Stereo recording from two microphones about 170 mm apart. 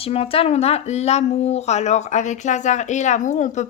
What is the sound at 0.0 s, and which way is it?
Speech, 35° left (ahead or behind).